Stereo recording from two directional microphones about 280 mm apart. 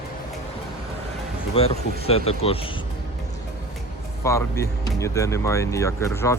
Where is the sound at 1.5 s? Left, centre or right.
Left.